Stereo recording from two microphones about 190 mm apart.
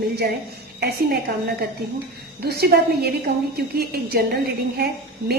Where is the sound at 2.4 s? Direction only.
55° right (ahead or behind).